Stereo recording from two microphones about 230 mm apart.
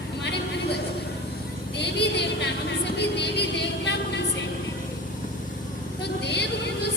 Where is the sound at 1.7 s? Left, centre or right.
Left.